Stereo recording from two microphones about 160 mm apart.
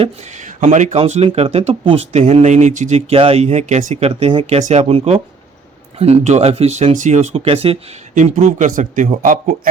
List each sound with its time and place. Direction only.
0.0 s speech: 45° right (ahead or behind)